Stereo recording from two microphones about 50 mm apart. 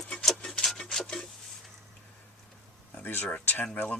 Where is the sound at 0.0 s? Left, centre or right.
Centre.